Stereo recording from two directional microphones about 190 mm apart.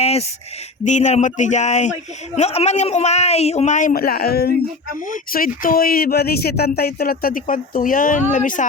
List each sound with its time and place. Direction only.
0.0 s speech: 35° left (ahead or behind)